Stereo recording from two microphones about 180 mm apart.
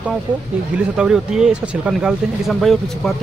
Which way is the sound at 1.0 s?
5° right (ahead or behind).